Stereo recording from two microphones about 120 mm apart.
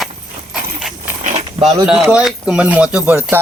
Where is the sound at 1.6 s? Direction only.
5° right (ahead or behind).